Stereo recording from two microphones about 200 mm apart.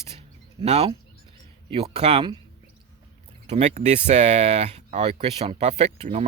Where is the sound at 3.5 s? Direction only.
35° right (ahead or behind).